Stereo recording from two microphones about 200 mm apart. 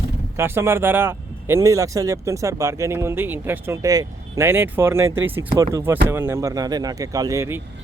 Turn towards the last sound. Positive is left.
turn(degrees=-15)  # may be behind; listen again after turning